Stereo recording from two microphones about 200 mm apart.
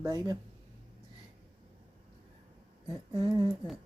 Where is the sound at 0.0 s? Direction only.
20° right (ahead or behind).